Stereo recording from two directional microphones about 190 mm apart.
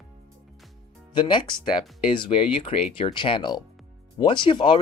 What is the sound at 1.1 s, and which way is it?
Speech, 25° left (ahead or behind).